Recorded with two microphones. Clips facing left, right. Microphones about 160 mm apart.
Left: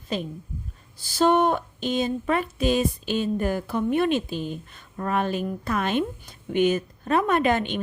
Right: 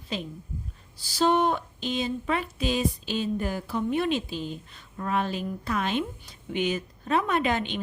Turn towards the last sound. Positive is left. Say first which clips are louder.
# left 4 dB
turn(degrees=50)  # may be behind; listen again after turning